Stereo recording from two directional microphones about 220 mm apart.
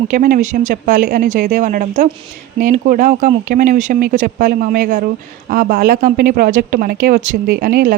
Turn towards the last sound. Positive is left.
turn(degrees=-40)  # may be behind; listen again after turning